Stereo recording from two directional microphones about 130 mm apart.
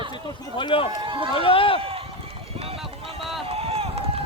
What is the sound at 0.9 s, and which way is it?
Speech, 40° right (ahead or behind).